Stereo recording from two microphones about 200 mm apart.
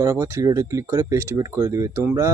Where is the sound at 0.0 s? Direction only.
15° right (ahead or behind).